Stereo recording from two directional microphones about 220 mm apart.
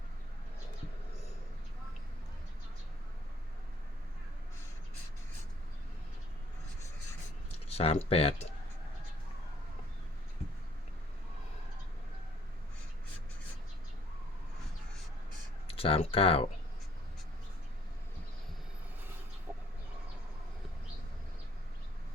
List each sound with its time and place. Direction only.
7.7 s speech: 30° left (ahead or behind)
15.6 s speech: 25° left (ahead or behind)